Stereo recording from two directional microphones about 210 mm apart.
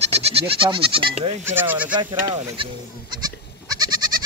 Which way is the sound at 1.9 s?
20° right (ahead or behind).